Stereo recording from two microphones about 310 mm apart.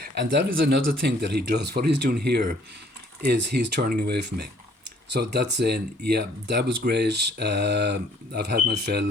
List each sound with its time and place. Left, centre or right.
0.1 s speech: right